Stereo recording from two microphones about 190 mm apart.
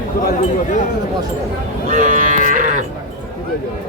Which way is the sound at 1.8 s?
40° right (ahead or behind).